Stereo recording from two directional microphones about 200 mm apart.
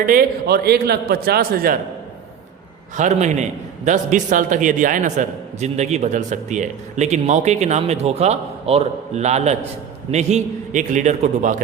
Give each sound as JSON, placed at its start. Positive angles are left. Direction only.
{"t": 0.0, "sound": "a man's voice", "side_deg": -45}
{"t": 2.9, "sound": "a man's voice", "side_deg": -35}